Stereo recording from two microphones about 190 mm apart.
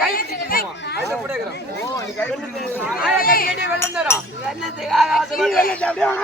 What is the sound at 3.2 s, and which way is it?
Speech, 50° left (ahead or behind).